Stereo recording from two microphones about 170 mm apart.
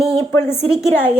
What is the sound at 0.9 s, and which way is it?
Speech, 10° left (ahead or behind).